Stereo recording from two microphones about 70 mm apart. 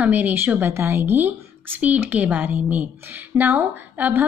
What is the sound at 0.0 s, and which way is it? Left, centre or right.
A woman's voice, right.